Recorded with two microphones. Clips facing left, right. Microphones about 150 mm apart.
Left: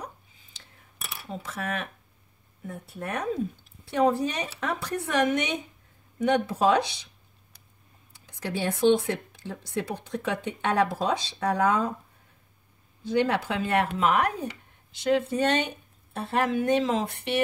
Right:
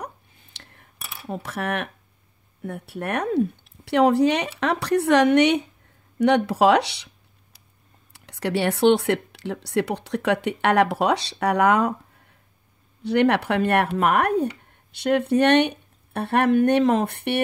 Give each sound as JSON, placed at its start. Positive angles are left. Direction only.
{"t": 0.0, "sound": "a sound", "side_deg": -65}
{"t": 1.3, "sound": "speech", "side_deg": -65}
{"t": 8.1, "sound": "speech", "side_deg": -70}
{"t": 13.0, "sound": "speech", "side_deg": -70}